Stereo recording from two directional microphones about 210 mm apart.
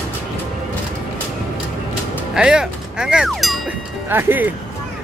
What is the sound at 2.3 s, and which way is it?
Music, 5° right (ahead or behind).